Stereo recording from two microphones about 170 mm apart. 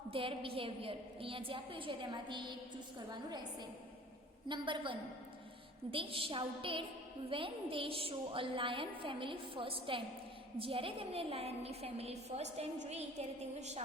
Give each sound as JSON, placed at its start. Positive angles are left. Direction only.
{"t": 0.1, "sound": "a woman's voice", "side_deg": -30}